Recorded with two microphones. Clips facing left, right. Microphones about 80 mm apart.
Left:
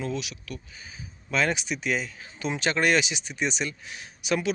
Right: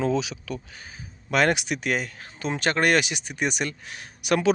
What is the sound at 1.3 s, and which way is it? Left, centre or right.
Speech, right.